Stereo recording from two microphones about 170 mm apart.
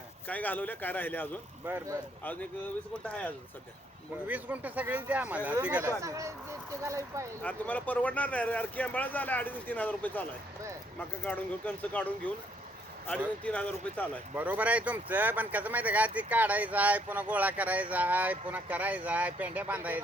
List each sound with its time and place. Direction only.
0.3 s speech: 10° left (ahead or behind)
1.6 s speech: 15° right (ahead or behind)
3.1 s speech: 10° left (ahead or behind)
4.3 s speech: 10° right (ahead or behind)
7.4 s speech: 10° left (ahead or behind)
11.3 s speech: 10° left (ahead or behind)
14.3 s speech: 10° right (ahead or behind)